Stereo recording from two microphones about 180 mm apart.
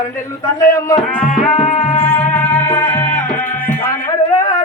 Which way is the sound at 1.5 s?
40° left (ahead or behind).